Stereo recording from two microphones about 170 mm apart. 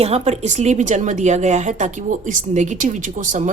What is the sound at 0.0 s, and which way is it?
A woman's voice, 40° right (ahead or behind).